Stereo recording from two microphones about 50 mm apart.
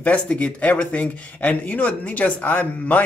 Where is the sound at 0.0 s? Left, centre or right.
Left.